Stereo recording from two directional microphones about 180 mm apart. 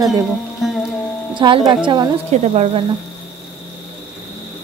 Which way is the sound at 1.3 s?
25° right (ahead or behind).